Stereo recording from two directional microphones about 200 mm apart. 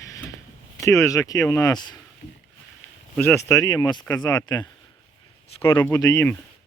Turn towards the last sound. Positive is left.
turn(degrees=15)  # may be behind; listen again after turning